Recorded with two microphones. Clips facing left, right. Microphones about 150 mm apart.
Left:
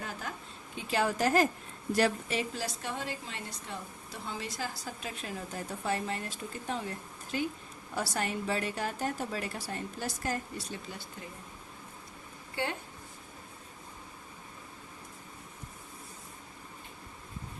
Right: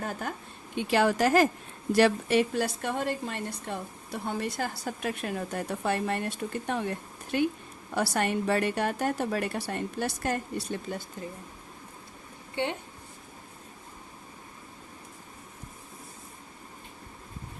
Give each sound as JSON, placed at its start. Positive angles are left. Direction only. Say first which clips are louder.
{"t": 0.0, "sound": "a sound", "louder": "right 6 dB", "side_deg": -50}
{"t": 0.8, "sound": "a woman's voice", "louder": "right 6 dB", "side_deg": -70}
{"t": 12.6, "sound": "speech", "louder": "right 4 dB", "side_deg": -20}